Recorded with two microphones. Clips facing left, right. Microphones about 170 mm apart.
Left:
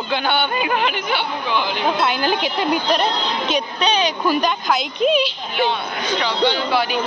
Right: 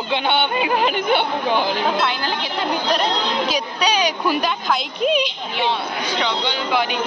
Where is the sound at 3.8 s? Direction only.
10° right (ahead or behind).